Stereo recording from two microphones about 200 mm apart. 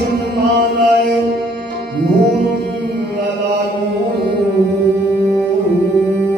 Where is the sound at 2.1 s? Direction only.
55° right (ahead or behind).